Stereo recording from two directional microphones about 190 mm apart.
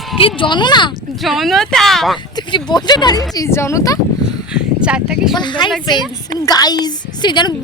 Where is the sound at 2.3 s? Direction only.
20° left (ahead or behind).